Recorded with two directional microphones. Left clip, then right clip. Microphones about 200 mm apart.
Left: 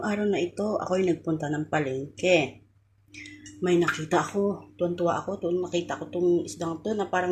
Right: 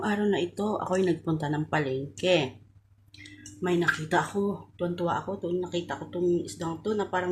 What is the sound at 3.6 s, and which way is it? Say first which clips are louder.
Speech: left 2 dB; 5° right (ahead or behind).